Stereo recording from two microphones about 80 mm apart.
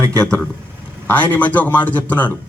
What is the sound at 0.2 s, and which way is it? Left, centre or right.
A man's voice, centre.